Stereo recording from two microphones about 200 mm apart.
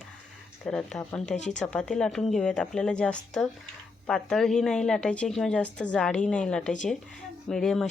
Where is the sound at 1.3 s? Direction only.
35° left (ahead or behind).